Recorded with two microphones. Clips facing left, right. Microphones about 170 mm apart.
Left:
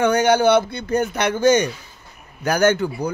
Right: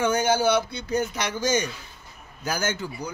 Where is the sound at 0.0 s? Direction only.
70° left (ahead or behind).